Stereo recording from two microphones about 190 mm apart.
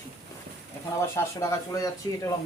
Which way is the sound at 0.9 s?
15° left (ahead or behind).